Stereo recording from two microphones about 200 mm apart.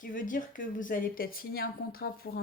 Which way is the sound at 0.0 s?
40° left (ahead or behind).